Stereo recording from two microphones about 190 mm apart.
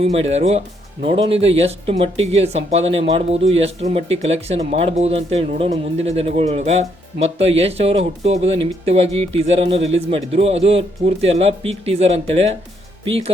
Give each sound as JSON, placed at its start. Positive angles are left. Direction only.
{"t": 0.0, "sound": "speech", "side_deg": -35}